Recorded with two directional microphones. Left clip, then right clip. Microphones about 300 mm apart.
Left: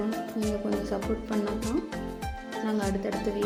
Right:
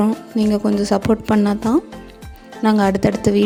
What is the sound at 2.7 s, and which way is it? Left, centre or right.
Speech, right.